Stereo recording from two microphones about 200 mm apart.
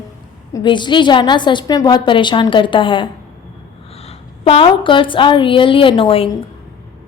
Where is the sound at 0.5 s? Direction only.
25° left (ahead or behind).